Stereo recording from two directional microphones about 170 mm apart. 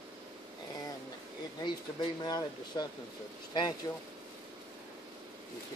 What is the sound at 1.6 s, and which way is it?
Speech, 25° left (ahead or behind).